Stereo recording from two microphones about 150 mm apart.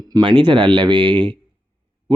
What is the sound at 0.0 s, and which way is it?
Speech, 30° right (ahead or behind).